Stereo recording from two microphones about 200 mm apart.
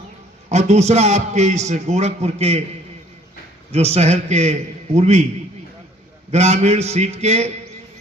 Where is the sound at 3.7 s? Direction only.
30° right (ahead or behind).